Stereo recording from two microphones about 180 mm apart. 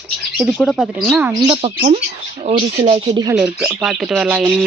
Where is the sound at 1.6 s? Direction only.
25° right (ahead or behind).